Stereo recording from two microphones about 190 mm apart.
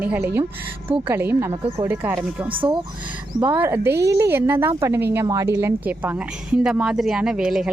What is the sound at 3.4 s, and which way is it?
Speech, 10° right (ahead or behind).